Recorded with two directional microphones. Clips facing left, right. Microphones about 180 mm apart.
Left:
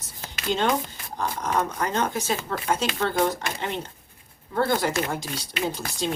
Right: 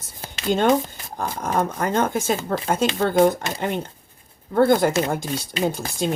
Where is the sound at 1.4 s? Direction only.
50° right (ahead or behind).